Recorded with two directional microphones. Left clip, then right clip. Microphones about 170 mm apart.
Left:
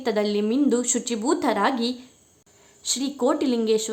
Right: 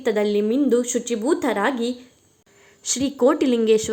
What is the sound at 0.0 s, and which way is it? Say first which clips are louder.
A woman's voice: right 3 dB; 15° right (ahead or behind).